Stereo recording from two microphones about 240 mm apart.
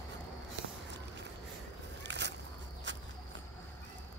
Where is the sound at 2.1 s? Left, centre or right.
Right.